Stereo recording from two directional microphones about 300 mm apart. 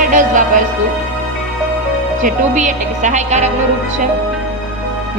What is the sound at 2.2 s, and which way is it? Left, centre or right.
Speech, right.